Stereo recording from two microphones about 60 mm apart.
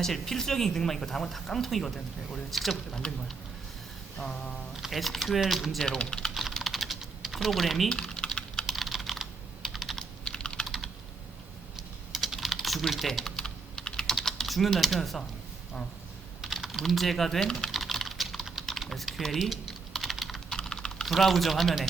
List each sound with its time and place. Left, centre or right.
0.0 s speech: centre
4.2 s speech: centre
4.8 s speech: centre
6.3 s typing: centre
8.6 s computer keyboard: centre
10.2 s computer keyboard: centre
12.1 s typing: centre
14.3 s speech: centre
16.4 s speech: centre
17.7 s typing: centre
20.5 s typing: centre